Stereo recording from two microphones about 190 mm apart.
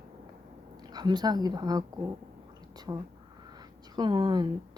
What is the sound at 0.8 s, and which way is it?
A woman's voice, 20° right (ahead or behind).